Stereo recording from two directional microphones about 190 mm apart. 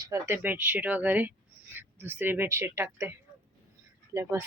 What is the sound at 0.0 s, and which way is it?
Speech, 15° right (ahead or behind).